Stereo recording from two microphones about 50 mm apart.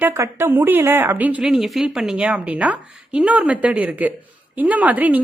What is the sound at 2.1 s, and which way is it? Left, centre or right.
A woman's voice, right.